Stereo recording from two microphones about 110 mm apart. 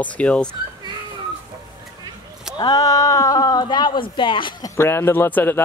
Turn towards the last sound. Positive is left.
turn(degrees=15)  # may be behind; listen again after turning